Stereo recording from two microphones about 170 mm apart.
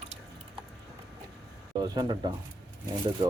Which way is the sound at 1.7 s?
25° right (ahead or behind).